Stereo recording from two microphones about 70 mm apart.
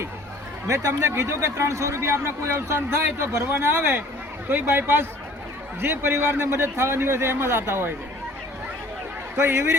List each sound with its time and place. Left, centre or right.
0.7 s speech: right
9.3 s a man's voice: right